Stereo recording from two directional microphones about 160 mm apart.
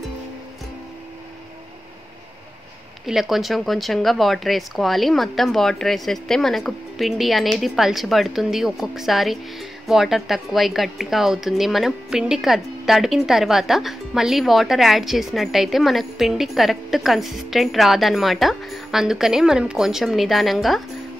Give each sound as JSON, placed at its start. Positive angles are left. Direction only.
{"t": 3.1, "sound": "speech", "side_deg": 0}